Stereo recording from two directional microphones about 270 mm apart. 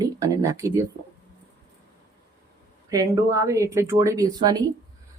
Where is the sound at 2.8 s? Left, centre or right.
Centre.